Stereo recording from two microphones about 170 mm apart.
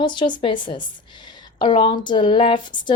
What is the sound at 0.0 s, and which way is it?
A woman's voice, 25° left (ahead or behind).